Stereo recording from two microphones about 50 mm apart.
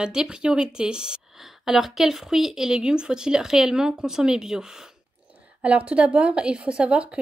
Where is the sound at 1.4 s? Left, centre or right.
Centre.